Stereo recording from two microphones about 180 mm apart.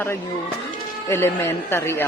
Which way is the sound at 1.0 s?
15° left (ahead or behind).